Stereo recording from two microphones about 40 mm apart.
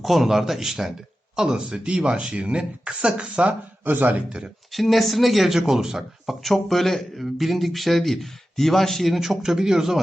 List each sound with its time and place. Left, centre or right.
0.0 s speech: centre; by 3.5 s right
3.9 s a man's voice: right
4.3 s speech: right
4.7 s speech: centre